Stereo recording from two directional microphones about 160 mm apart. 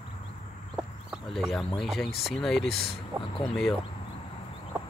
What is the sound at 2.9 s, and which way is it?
Speech, 35° left (ahead or behind).